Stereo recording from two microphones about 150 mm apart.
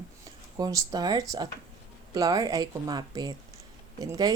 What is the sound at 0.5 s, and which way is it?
Speech, 25° right (ahead or behind).